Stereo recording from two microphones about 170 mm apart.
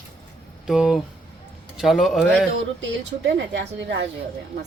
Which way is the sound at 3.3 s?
90° right.